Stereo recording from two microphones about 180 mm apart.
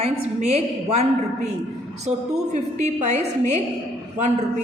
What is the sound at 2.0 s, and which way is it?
A woman's voice, 40° right (ahead or behind).